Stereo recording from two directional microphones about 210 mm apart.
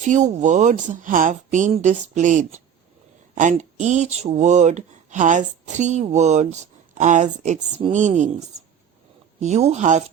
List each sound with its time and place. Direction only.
0.0 s speech: 35° right (ahead or behind)